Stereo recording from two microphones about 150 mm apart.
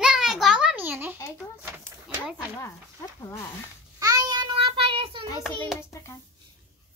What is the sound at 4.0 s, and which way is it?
Child singing, 25° right (ahead or behind).